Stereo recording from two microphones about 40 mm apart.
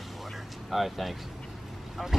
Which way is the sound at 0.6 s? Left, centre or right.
Centre.